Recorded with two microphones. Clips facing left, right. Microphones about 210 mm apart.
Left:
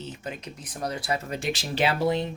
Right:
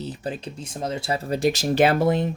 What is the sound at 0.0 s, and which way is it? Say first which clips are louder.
Speech: right 6 dB; 35° right (ahead or behind).